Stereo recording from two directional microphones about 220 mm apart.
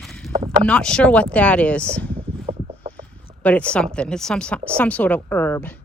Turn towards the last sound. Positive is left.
turn(degrees=10)  # may be behind; listen again after turning